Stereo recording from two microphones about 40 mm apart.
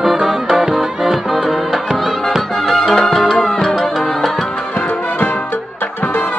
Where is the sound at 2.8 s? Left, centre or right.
Centre.